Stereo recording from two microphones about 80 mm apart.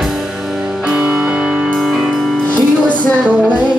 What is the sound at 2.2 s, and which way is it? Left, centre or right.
Music, centre.